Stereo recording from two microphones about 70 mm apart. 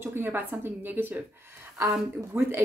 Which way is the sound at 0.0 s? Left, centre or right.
Right.